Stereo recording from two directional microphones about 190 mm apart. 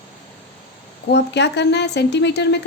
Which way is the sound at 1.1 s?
65° left (ahead or behind).